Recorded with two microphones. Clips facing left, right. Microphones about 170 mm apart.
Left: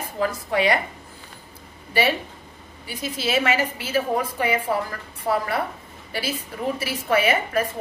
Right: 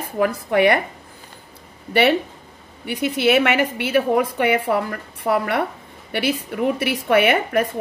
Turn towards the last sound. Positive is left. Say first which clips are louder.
# right 4 dB
turn(degrees=-65)  # may be behind; listen again after turning